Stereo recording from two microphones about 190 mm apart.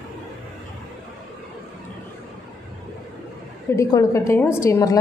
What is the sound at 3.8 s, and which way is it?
A woman's voice, 15° left (ahead or behind).